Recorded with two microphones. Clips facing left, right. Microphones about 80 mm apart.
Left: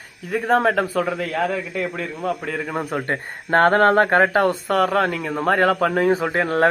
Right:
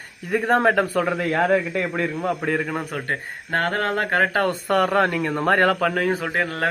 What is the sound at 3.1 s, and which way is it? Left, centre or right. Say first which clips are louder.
Speech: left 4 dB; left.